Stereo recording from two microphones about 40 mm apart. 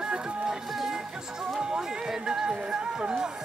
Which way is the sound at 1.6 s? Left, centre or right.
Centre.